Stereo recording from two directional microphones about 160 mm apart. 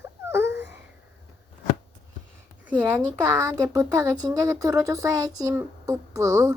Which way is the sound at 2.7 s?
15° right (ahead or behind).